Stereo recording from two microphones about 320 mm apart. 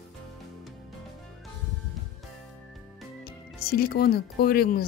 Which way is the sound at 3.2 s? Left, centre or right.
Left.